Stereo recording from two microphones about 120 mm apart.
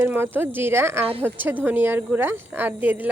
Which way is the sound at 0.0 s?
20° right (ahead or behind).